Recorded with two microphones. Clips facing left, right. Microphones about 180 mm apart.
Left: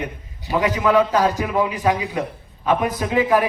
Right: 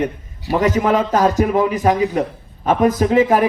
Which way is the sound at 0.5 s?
45° right (ahead or behind).